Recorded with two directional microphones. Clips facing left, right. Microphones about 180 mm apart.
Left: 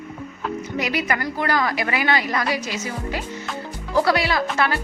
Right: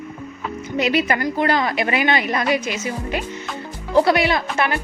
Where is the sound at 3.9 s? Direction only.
20° right (ahead or behind).